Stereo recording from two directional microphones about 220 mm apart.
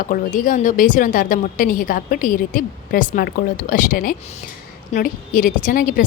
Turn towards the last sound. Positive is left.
turn(degrees=40)  # may be behind; listen again after turning